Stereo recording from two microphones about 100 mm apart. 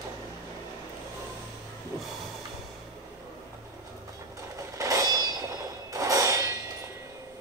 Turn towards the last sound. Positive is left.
turn(degrees=-30)  # may be behind; listen again after turning